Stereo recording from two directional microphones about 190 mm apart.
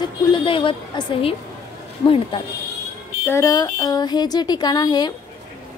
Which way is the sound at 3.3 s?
20° left (ahead or behind).